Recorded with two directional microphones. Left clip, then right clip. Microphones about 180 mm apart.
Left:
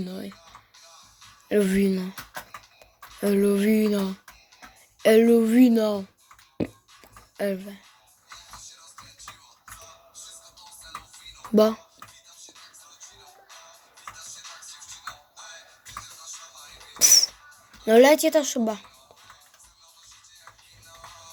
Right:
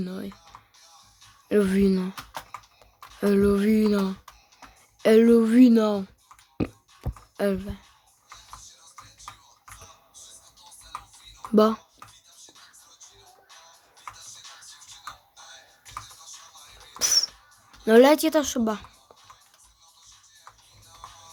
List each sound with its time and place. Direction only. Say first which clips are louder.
0.0 s speech: right 1 dB; 15° right (ahead or behind)
1.5 s speech: even; 20° right (ahead or behind)
3.2 s a sound: right 1 dB; 15° right (ahead or behind)
5.0 s speech: even; 20° right (ahead or behind)
7.0 s a sound: right 10 dB; 25° right (ahead or behind)
7.3 s speech: right 2 dB; 25° right (ahead or behind)
11.5 s speech: even; 20° right (ahead or behind)
17.0 s music: left 5 dB; 15° right (ahead or behind)
17.8 s speech: left 1 dB; 20° right (ahead or behind)